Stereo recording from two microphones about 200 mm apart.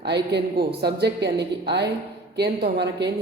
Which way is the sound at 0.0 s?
55° right (ahead or behind).